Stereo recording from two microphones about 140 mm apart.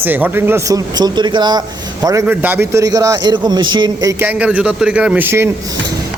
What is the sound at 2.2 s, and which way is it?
Speech, 10° right (ahead or behind).